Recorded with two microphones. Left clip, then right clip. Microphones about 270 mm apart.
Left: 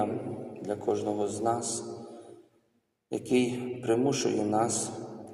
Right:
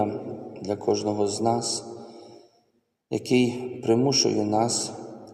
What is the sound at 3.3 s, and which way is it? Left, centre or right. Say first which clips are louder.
Speech: right 4 dB; right.